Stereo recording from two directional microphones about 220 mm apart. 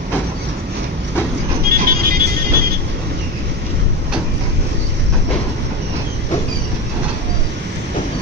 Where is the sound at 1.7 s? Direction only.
40° right (ahead or behind).